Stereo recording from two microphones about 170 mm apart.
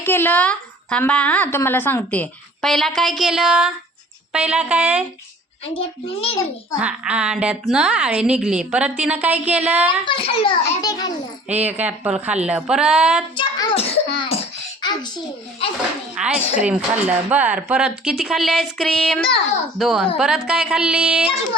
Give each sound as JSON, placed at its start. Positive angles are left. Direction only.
{"t": 0.0, "sound": "speech", "side_deg": 15}
{"t": 5.6, "sound": "a child's voice", "side_deg": 35}
{"t": 6.7, "sound": "speech", "side_deg": -5}
{"t": 10.1, "sound": "a child's voice", "side_deg": 30}
{"t": 11.4, "sound": "speech", "side_deg": -10}
{"t": 13.3, "sound": "a child's voice", "side_deg": 30}
{"t": 16.1, "sound": "speech", "side_deg": -5}